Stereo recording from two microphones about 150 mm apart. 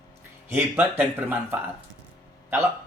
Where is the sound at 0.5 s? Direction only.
10° right (ahead or behind).